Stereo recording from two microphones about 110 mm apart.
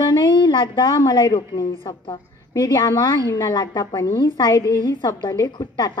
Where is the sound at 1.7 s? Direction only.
50° left (ahead or behind).